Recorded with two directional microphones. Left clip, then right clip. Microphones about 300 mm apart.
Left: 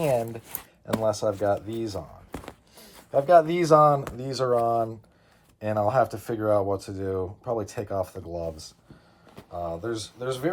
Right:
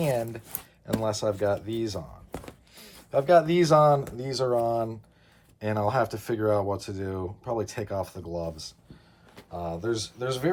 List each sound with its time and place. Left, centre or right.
0.9 s speech: centre
9.3 s a sound: left
9.8 s speech: centre